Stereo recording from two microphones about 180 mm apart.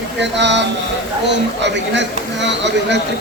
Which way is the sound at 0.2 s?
75° right (ahead or behind).